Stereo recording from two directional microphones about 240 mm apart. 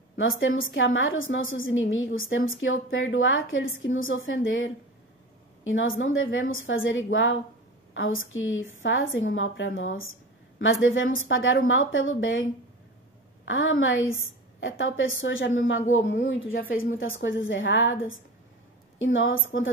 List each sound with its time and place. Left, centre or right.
0.2 s a woman's voice: left
13.5 s a woman's voice: left